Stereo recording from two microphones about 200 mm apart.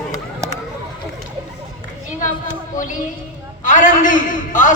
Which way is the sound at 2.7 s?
40° left (ahead or behind).